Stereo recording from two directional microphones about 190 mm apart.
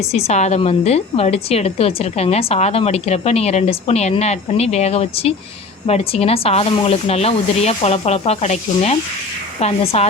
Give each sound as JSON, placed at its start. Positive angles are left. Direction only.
{"t": 0.1, "sound": "a woman's voice", "side_deg": 35}